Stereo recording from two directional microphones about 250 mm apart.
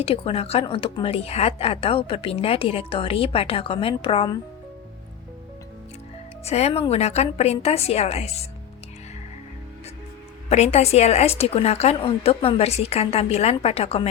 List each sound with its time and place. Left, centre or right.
0.0 s speech: left
6.4 s speech: left
10.5 s speech: left